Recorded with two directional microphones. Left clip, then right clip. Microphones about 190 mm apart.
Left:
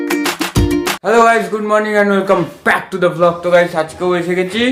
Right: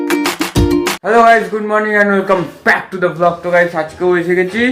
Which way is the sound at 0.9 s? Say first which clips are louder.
Right 2 dB; 5° left (ahead or behind).